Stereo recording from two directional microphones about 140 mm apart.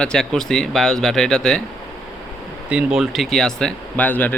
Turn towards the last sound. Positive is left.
turn(degrees=10)  # may be behind; listen again after turning